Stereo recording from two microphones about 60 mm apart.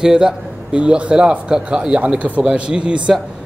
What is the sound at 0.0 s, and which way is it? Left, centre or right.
A man's voice, centre.